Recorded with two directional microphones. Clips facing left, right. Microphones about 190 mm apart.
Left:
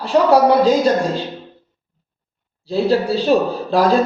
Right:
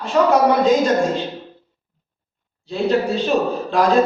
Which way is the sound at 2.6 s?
35° left (ahead or behind).